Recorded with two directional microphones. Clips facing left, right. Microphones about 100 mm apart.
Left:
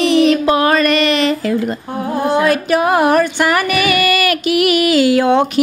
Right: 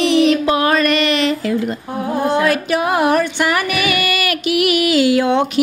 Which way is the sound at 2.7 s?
45° left (ahead or behind).